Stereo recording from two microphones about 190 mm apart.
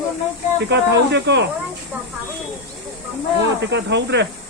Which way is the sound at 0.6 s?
65° right (ahead or behind).